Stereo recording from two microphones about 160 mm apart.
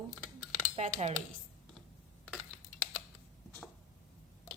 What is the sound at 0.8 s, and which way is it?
Speech, 45° right (ahead or behind).